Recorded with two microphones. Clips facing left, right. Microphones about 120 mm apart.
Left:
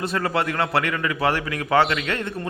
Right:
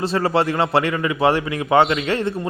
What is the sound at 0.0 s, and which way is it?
A man's voice, 30° right (ahead or behind).